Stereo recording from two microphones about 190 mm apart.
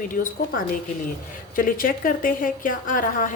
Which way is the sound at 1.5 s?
45° left (ahead or behind).